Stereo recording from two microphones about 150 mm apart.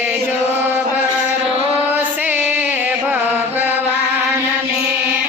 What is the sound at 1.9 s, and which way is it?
Music, 10° right (ahead or behind).